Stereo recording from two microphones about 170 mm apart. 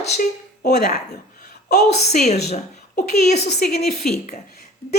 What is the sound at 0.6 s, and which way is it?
Speech, 70° left (ahead or behind).